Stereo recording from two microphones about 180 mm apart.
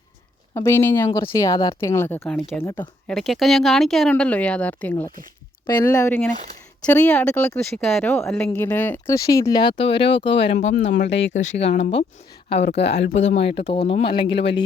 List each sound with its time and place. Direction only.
0.5 s speech: 15° left (ahead or behind)
2.2 s speech: 5° left (ahead or behind)
2.6 s speech: 25° left (ahead or behind)
3.1 s speech: centre (ahead or behind)
5.6 s speech: 20° left (ahead or behind); by 8.1 s centre (ahead or behind)
8.4 s speech: 10° left (ahead or behind); by 10.8 s 40° left (ahead or behind)
11.0 s speech: 85° left
11.5 s speech: 40° left (ahead or behind)
12.7 s speech: 70° left (ahead or behind)
13.3 s speech: 35° left (ahead or behind)